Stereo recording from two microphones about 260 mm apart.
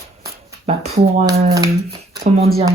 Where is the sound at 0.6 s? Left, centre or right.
Right.